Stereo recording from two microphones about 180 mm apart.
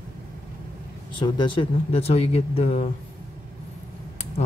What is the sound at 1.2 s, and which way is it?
Speech, 25° left (ahead or behind).